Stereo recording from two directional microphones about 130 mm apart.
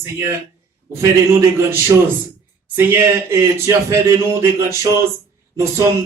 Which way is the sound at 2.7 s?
20° right (ahead or behind).